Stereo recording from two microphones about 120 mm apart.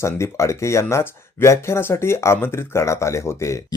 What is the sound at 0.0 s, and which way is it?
Speech, 25° left (ahead or behind).